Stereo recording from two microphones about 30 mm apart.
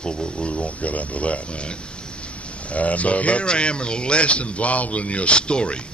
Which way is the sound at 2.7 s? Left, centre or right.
Left.